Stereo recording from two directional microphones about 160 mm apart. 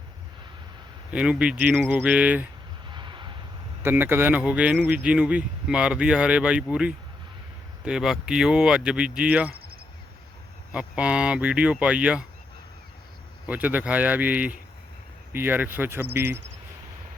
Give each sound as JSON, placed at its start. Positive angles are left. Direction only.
{"t": 1.1, "sound": "speech", "side_deg": -5}
{"t": 2.9, "sound": "vehicle", "side_deg": -30}
{"t": 3.8, "sound": "speech", "side_deg": -15}
{"t": 10.7, "sound": "speech", "side_deg": -5}
{"t": 13.5, "sound": "speech", "side_deg": -10}